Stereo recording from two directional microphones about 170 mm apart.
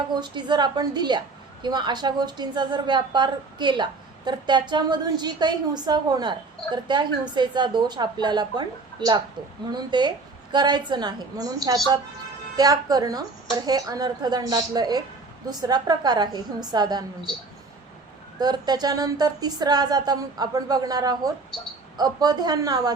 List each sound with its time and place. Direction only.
0.1 s speech: 25° right (ahead or behind)
18.3 s speech: 25° right (ahead or behind)